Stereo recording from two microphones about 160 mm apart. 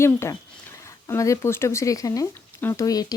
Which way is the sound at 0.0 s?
15° left (ahead or behind).